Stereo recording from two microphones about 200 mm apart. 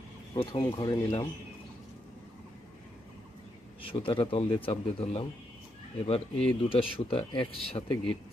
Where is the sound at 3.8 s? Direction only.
25° left (ahead or behind).